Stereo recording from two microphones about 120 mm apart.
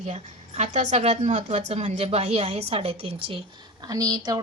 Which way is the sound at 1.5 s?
70° right (ahead or behind).